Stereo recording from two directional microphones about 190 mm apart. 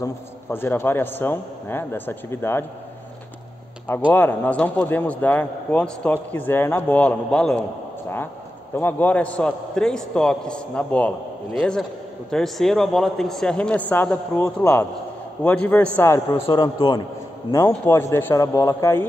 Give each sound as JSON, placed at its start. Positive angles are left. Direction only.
{"t": 0.0, "sound": "a man's voice", "side_deg": 10}
{"t": 4.1, "sound": "a man's voice", "side_deg": 10}
{"t": 8.7, "sound": "a man's voice", "side_deg": 10}
{"t": 16.4, "sound": "a man's voice", "side_deg": 25}